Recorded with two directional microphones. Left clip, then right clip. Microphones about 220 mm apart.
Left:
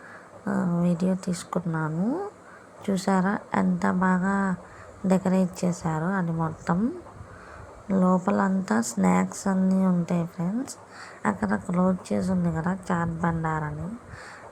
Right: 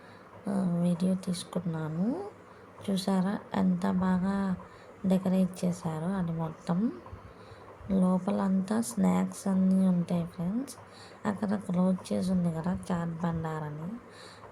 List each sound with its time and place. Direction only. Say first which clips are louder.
0.4 s a sound: left 5 dB; 15° left (ahead or behind)
0.9 s speech: left 5 dB; 15° left (ahead or behind)
7.9 s speech: left 6 dB; 10° left (ahead or behind)